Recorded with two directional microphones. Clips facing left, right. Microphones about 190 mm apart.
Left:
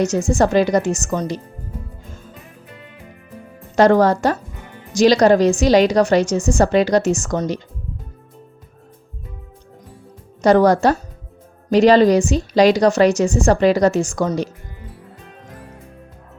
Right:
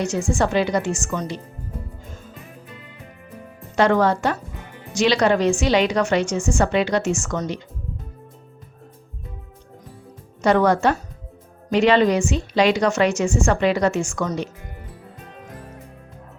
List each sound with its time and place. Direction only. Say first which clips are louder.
0.0 s a woman's voice: left 5 dB; 40° left (ahead or behind)
3.8 s a woman's voice: left 5 dB; 40° left (ahead or behind)
10.4 s a woman's voice: left 4 dB; 40° left (ahead or behind)